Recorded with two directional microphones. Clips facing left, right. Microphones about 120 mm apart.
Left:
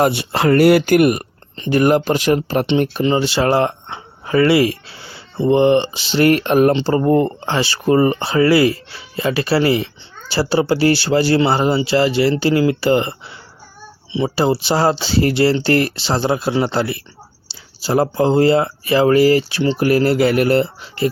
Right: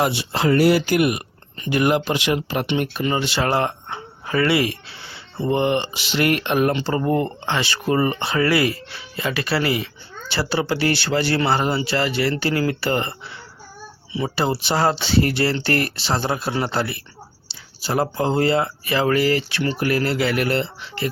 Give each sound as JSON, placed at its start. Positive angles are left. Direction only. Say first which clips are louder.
{"t": 0.0, "sound": "speech", "louder": "left 5 dB", "side_deg": 55}
{"t": 1.5, "sound": "speech", "louder": "left 5 dB", "side_deg": 35}
{"t": 14.3, "sound": "speech", "louder": "left 4 dB", "side_deg": 30}